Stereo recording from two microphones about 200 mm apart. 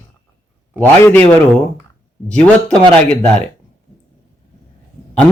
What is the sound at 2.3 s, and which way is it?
Speech, 5° left (ahead or behind).